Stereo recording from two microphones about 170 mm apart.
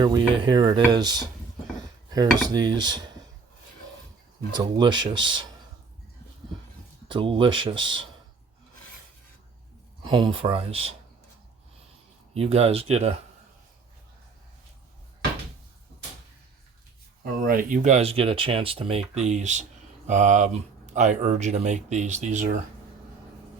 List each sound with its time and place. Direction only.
0.0 s speech: 25° right (ahead or behind)
2.5 s speech: 25° right (ahead or behind)
4.5 s speech: 25° right (ahead or behind)
7.1 s speech: 30° right (ahead or behind)
10.1 s speech: 30° right (ahead or behind)
12.3 s speech: 40° right (ahead or behind)
17.4 s speech: 55° right (ahead or behind)